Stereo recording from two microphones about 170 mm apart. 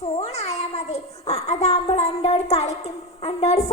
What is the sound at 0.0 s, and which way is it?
A child's voice, 40° left (ahead or behind).